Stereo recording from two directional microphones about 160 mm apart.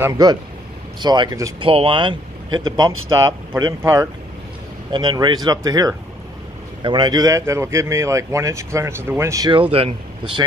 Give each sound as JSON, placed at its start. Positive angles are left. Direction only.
{"t": 0.0, "sound": "speech", "side_deg": -25}
{"t": 3.8, "sound": "speech", "side_deg": -15}
{"t": 4.9, "sound": "speech", "side_deg": -30}
{"t": 9.5, "sound": "speech", "side_deg": -35}